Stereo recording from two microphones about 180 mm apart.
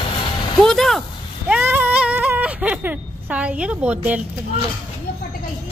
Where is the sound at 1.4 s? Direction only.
10° right (ahead or behind).